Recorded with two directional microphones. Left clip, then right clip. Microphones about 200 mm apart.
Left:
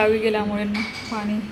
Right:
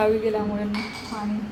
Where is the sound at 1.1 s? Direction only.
35° left (ahead or behind).